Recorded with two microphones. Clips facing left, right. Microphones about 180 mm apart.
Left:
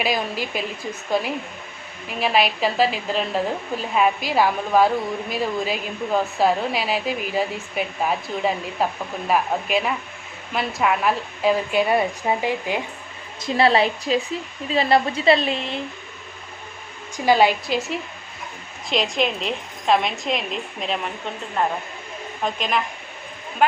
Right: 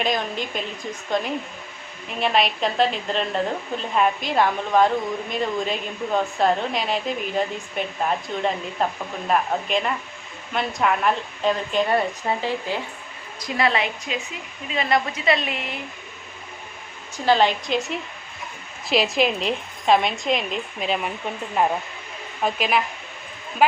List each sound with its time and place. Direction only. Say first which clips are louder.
0.0 s a woman's voice: left 1 dB; 5° left (ahead or behind)
13.4 s speech: left 5 dB; 30° left (ahead or behind)
17.2 s a woman's voice: left 2 dB; 10° left (ahead or behind); by 22.8 s 5° right (ahead or behind)